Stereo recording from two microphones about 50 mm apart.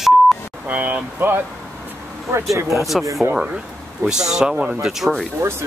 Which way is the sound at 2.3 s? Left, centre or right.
Right.